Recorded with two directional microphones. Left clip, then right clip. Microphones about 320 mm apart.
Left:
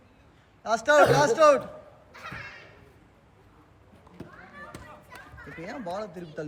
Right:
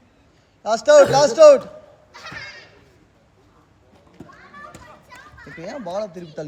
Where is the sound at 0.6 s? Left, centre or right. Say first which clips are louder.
Right 8 dB; centre.